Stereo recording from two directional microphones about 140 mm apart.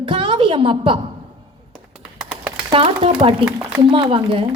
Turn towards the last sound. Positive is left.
turn(degrees=-40)  # may be behind; listen again after turning